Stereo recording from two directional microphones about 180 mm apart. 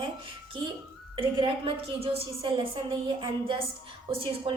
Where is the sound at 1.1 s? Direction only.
30° right (ahead or behind).